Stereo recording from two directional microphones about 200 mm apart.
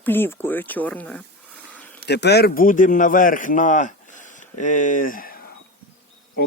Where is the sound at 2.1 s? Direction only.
55° left (ahead or behind).